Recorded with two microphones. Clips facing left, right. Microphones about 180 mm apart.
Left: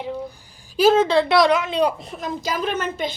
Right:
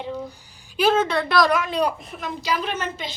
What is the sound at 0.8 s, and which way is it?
A woman's voice, 35° left (ahead or behind).